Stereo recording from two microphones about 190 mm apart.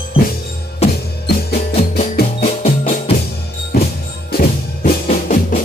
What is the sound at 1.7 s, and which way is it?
Music, 40° left (ahead or behind).